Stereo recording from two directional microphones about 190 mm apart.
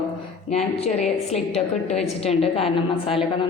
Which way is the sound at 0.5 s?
35° left (ahead or behind).